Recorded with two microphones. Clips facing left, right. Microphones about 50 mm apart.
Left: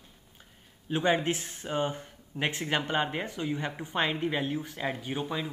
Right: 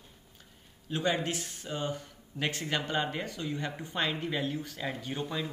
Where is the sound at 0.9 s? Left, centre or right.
Left.